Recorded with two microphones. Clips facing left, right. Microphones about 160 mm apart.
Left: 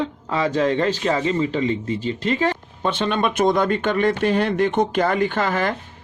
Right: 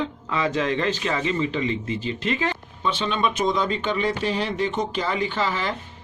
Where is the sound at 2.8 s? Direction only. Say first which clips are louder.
Left 3 dB; 55° left (ahead or behind).